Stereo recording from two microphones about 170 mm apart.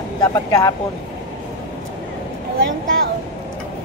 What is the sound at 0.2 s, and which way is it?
Speech, 20° left (ahead or behind).